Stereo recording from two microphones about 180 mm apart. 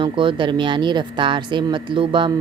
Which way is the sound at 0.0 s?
25° right (ahead or behind).